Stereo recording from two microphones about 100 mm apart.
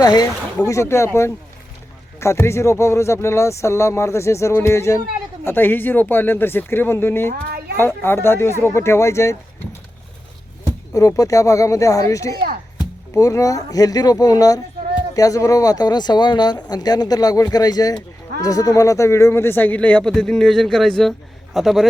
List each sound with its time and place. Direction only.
0.0 s speech: 40° left (ahead or behind)
10.9 s speech: 35° left (ahead or behind); by 21.8 s centre (ahead or behind)